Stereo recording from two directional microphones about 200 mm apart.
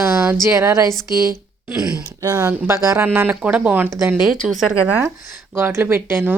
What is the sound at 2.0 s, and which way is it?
Speech, 15° right (ahead or behind).